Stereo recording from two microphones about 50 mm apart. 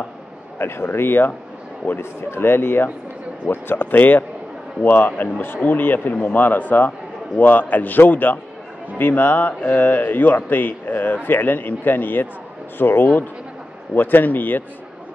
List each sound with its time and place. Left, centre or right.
0.6 s a man's voice: left